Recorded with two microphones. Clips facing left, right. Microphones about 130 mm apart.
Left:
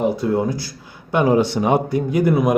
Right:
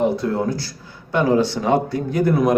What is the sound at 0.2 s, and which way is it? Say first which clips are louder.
Speech: left 2 dB; 15° left (ahead or behind).